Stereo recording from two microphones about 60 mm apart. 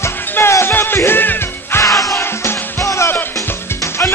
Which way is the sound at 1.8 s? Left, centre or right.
Left.